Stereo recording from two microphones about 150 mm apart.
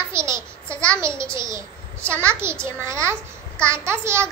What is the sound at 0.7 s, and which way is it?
Speech, 5° left (ahead or behind).